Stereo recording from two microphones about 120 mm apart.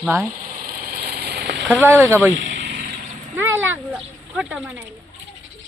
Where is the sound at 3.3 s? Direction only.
20° right (ahead or behind).